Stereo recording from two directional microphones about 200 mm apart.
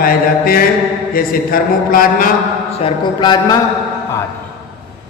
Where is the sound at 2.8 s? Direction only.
20° left (ahead or behind).